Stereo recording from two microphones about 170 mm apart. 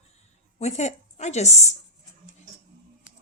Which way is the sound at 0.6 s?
40° left (ahead or behind).